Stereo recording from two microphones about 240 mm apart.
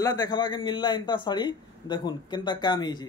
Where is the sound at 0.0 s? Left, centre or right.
Centre.